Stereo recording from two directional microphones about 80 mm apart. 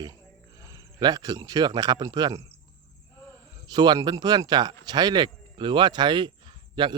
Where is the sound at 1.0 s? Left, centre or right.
Right.